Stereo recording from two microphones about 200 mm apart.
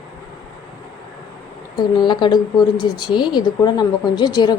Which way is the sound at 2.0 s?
20° left (ahead or behind).